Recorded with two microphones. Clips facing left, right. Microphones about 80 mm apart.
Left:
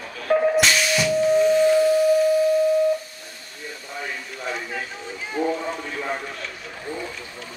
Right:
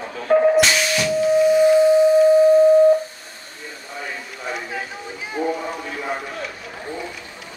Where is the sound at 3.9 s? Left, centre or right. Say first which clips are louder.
Right 1 dB; centre.